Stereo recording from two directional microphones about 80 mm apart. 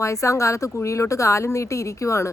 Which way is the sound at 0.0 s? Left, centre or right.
Left.